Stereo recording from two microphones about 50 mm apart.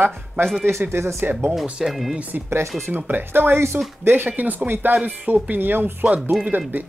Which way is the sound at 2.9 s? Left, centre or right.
Right.